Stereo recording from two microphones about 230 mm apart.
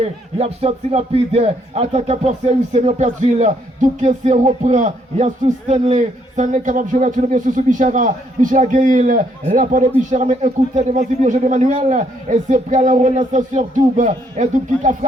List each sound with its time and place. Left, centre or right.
0.0 s speech: right